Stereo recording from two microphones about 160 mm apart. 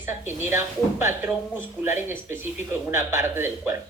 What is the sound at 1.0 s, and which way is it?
Speech, 15° right (ahead or behind).